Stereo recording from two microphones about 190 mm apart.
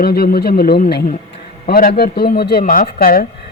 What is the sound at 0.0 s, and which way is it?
Speech, 50° left (ahead or behind).